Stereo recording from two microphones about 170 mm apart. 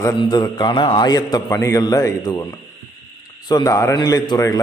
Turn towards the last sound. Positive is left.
turn(degrees=20)  # may be behind; listen again after turning